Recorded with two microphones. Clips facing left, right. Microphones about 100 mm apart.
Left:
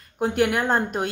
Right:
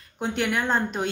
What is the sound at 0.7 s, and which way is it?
Speech, 50° left (ahead or behind).